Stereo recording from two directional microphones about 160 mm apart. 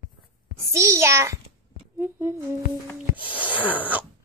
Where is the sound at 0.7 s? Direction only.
15° right (ahead or behind).